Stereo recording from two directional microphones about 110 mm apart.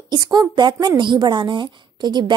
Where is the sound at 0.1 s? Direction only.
35° right (ahead or behind).